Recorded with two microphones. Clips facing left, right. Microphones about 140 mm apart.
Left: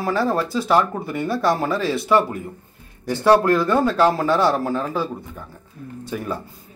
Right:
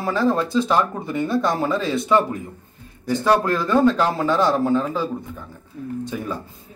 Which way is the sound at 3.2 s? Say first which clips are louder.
Left 4 dB; 10° left (ahead or behind).